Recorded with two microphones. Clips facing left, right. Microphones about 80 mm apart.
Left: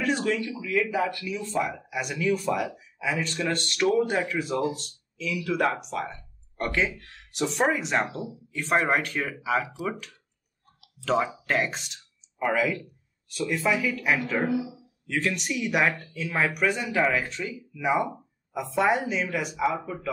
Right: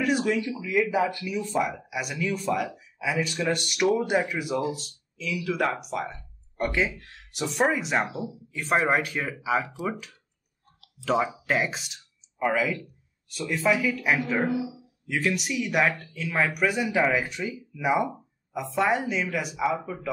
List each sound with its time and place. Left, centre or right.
0.0 s speech: centre
11.0 s speech: centre